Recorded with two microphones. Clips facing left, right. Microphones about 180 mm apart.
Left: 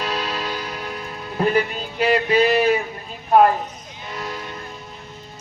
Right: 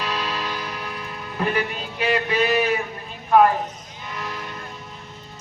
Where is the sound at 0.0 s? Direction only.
35° left (ahead or behind).